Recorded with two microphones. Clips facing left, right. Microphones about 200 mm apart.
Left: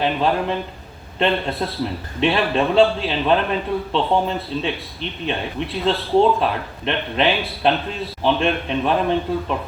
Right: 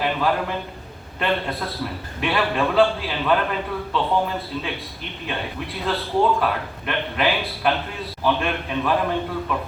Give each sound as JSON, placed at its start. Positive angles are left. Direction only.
{"t": 0.0, "sound": "a man's voice", "side_deg": 25}